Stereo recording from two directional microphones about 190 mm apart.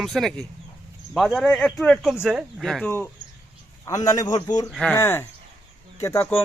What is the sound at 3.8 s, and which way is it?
Speech, 20° left (ahead or behind).